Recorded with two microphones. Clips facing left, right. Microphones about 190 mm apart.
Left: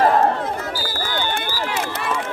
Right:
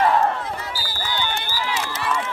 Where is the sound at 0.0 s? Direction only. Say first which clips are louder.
Left 3 dB; 40° left (ahead or behind).